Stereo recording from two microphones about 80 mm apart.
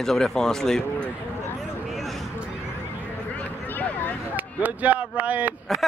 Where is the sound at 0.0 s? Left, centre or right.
Centre.